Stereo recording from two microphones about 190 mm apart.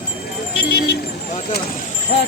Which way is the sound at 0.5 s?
55° left (ahead or behind).